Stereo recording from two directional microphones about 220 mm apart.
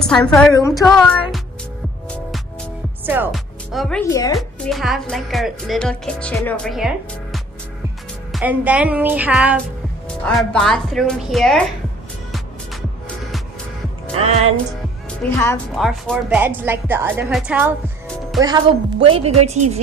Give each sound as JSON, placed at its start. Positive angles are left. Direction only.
{"t": 0.0, "sound": "speech", "side_deg": 5}
{"t": 0.8, "sound": "speech", "side_deg": 0}
{"t": 3.1, "sound": "speech", "side_deg": -5}
{"t": 4.1, "sound": "a woman's voice", "side_deg": 15}
{"t": 4.4, "sound": "speech", "side_deg": 0}
{"t": 8.3, "sound": "a woman's voice", "side_deg": -5}
{"t": 10.0, "sound": "speech", "side_deg": 5}
{"t": 14.2, "sound": "speech", "side_deg": -30}
{"t": 15.2, "sound": "a woman's voice", "side_deg": 10}
{"t": 18.4, "sound": "speech", "side_deg": -20}